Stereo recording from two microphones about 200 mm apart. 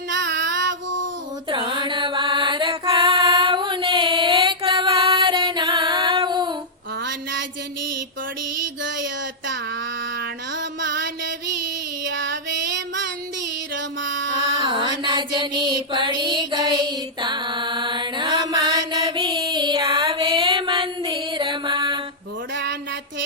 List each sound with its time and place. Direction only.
0.1 s child singing: 60° right (ahead or behind)
1.5 s mantra: 25° right (ahead or behind)
7.0 s a sound: 65° right (ahead or behind)
10.2 s mantra: 60° right (ahead or behind)
12.0 s female singing: 60° right (ahead or behind)
13.7 s music: 65° right (ahead or behind)
14.6 s mantra: 25° right (ahead or behind)
22.5 s a sound: 60° right (ahead or behind)